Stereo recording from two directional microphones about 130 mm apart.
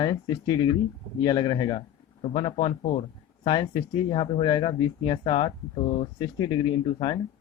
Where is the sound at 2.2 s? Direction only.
45° left (ahead or behind).